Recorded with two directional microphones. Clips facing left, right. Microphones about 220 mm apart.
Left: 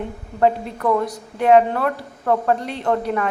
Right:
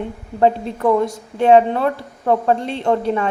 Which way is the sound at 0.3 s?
25° right (ahead or behind).